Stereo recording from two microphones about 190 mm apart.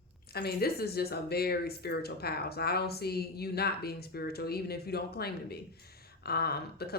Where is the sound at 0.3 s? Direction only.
55° left (ahead or behind).